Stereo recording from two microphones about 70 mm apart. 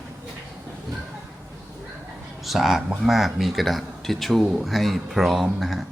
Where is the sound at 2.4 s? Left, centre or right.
Centre.